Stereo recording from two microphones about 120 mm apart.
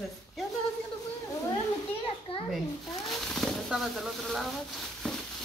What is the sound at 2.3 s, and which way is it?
Speech, 45° left (ahead or behind).